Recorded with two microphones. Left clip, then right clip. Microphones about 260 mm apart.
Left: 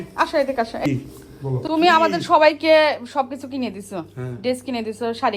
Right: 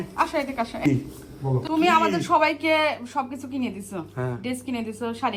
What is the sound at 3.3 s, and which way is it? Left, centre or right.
Speech, centre.